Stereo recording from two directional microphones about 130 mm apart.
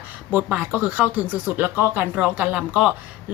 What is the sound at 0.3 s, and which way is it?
A woman's voice, 10° right (ahead or behind).